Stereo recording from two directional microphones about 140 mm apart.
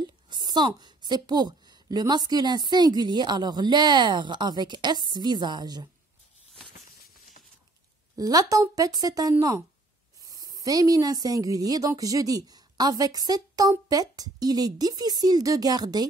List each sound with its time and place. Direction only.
0.0 s a woman's voice: 30° right (ahead or behind)
8.2 s speech: 25° right (ahead or behind)